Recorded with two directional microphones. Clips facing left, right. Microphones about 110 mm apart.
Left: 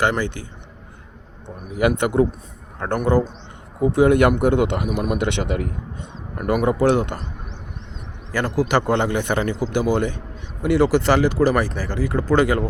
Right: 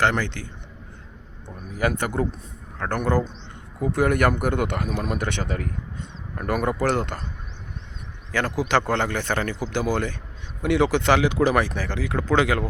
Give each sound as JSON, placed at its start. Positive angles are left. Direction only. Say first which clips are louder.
{"t": 0.0, "sound": "a man's voice", "louder": "left 2 dB", "side_deg": 15}
{"t": 1.9, "sound": "a man's voice", "louder": "left 7 dB", "side_deg": 20}
{"t": 6.3, "sound": "a man's voice", "louder": "left 5 dB", "side_deg": 10}
{"t": 8.3, "sound": "a man's voice", "louder": "left 3 dB", "side_deg": 10}
{"t": 10.6, "sound": "a man's voice", "louder": "left 3 dB", "side_deg": 5}